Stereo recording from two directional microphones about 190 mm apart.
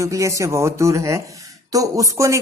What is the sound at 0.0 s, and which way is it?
Speech, 15° right (ahead or behind).